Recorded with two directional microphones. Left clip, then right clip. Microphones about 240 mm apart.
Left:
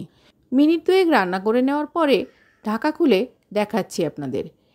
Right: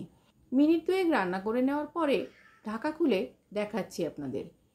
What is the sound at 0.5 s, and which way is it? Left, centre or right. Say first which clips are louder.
Speech: left 8 dB; left.